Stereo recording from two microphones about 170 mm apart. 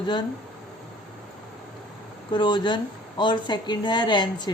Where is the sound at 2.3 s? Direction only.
25° left (ahead or behind).